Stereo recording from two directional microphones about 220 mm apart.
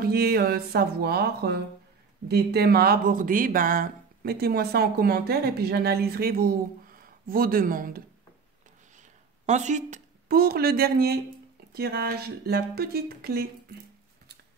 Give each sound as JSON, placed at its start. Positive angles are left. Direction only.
{"t": 0.0, "sound": "speech", "side_deg": -45}
{"t": 9.5, "sound": "speech", "side_deg": -35}